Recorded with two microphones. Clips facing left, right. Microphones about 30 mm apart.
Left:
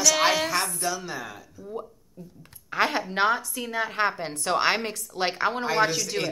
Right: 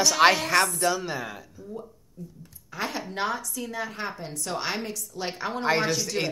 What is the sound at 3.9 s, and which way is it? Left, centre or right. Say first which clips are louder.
A woman's voice: left 8 dB; left.